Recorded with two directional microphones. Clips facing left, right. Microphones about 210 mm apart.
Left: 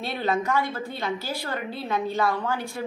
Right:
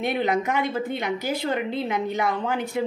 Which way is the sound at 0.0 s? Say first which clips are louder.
Right 3 dB; 20° right (ahead or behind).